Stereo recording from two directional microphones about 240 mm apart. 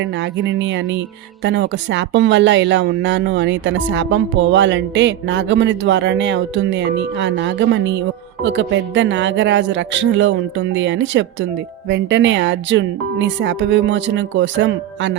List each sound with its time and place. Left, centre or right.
0.0 s speech: right